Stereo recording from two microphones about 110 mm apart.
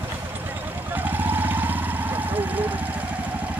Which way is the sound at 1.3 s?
15° right (ahead or behind).